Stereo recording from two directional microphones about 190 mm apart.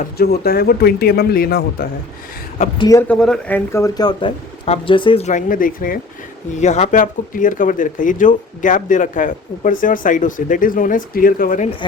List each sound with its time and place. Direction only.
0.0 s speech: 55° left (ahead or behind)
2.6 s speech: 25° left (ahead or behind)
3.1 s speech: centre (ahead or behind); by 11.7 s 45° left (ahead or behind)